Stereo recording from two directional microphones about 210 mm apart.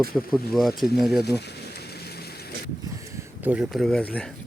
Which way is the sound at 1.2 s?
50° left (ahead or behind).